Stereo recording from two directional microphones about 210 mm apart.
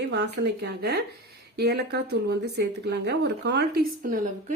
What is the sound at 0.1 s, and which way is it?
Speech, 50° right (ahead or behind).